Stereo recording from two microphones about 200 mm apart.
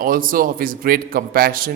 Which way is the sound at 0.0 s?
45° right (ahead or behind).